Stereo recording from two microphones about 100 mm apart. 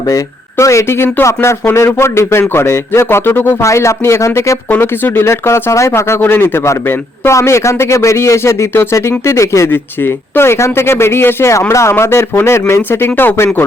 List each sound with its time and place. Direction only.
0.6 s speech: 30° left (ahead or behind)